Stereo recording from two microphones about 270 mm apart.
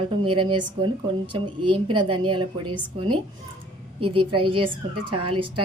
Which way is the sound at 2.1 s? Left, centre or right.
Centre.